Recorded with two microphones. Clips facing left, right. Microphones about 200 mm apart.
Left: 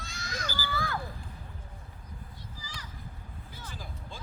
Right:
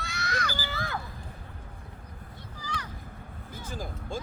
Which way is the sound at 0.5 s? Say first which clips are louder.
Left 1 dB; 20° right (ahead or behind).